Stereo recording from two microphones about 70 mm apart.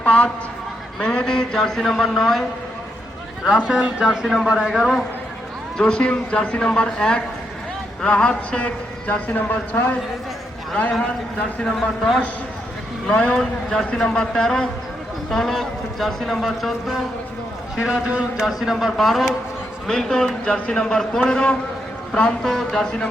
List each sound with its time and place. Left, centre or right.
0.0 s a man's voice: centre
3.4 s a man's voice: centre; by 10.0 s left
11.6 s a man's voice: centre
17.8 s speech: centre
18.3 s a man's voice: centre